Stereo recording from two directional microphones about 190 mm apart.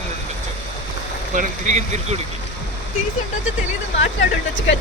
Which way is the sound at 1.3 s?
40° right (ahead or behind).